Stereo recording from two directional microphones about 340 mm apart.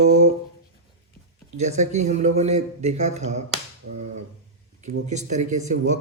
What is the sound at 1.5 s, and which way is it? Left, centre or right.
Speech, centre.